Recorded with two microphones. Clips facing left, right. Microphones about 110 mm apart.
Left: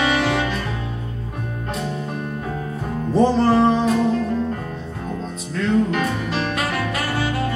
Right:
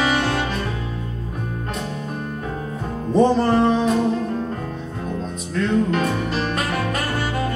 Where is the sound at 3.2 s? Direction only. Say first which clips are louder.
Left 1 dB; centre (ahead or behind).